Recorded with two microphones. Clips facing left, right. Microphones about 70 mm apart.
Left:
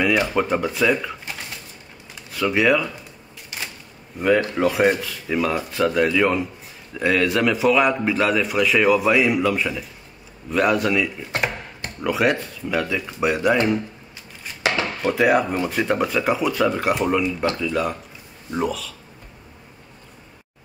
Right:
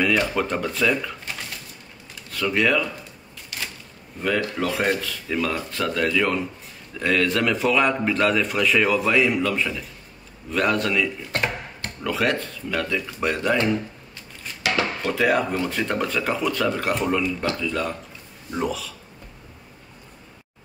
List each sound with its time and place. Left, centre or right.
0.0 s speech: centre
2.3 s speech: centre
3.5 s a sound: left
4.2 s a man's voice: centre